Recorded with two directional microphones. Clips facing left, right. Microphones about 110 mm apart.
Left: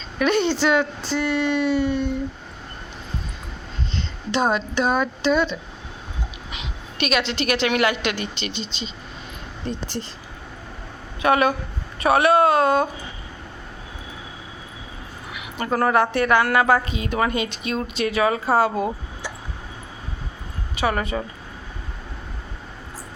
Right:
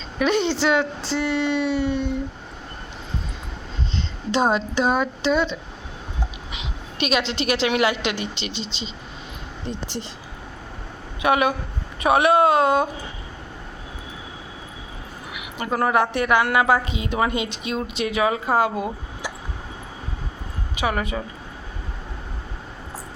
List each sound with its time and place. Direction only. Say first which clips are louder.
0.2 s speech: left 1 dB; 25° right (ahead or behind)
4.3 s a woman's voice: right 1 dB; 25° right (ahead or behind)
8.5 s speech: even; 90° right
9.6 s speech: left 2 dB; 20° right (ahead or behind)
11.2 s a woman's voice: left 1 dB; 15° right (ahead or behind)
15.3 s a woman's voice: left 2 dB; 15° right (ahead or behind)
20.7 s a woman's voice: left 1 dB; 10° right (ahead or behind)